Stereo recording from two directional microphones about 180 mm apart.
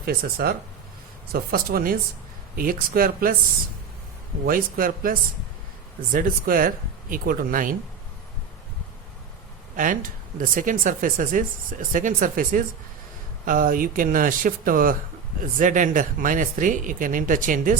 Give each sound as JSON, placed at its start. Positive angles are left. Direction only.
{"t": 0.0, "sound": "speech", "side_deg": -55}
{"t": 4.4, "sound": "speech", "side_deg": -50}
{"t": 6.1, "sound": "speech", "side_deg": -50}
{"t": 9.7, "sound": "speech", "side_deg": -50}